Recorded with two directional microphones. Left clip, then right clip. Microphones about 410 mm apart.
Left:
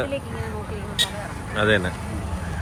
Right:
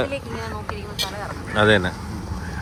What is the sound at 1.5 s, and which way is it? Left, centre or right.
Speech, centre.